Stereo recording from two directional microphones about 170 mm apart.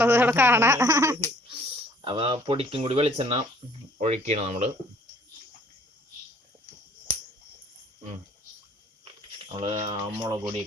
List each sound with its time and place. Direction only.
0.0 s speech: 15° right (ahead or behind)
2.0 s speech: 30° right (ahead or behind)
9.8 s speech: 25° right (ahead or behind)